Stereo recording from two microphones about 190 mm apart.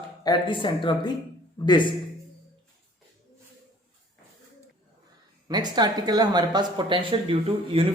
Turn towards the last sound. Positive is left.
turn(degrees=-30)  # may be behind; listen again after turning